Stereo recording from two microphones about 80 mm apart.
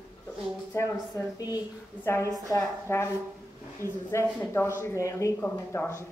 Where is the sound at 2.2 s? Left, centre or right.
Right.